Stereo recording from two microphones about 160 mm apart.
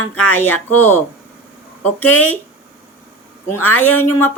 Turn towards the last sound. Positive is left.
turn(degrees=10)  # may be behind; listen again after turning